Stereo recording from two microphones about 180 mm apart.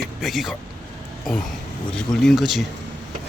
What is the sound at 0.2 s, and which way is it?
Speech, centre (ahead or behind).